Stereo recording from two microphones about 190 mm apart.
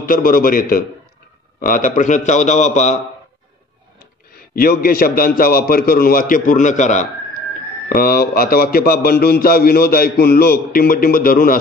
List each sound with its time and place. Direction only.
0.0 s a man's voice: 45° left (ahead or behind)
4.3 s a man's voice: 50° left (ahead or behind)
7.9 s a man's voice: 50° left (ahead or behind)